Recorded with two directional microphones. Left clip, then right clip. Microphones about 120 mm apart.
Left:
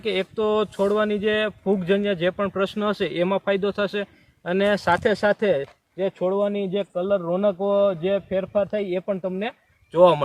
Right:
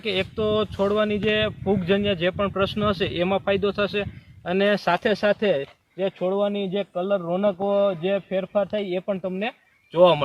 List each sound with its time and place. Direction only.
0.0 s speech: 40° left (ahead or behind)
5.0 s speech: 40° left (ahead or behind)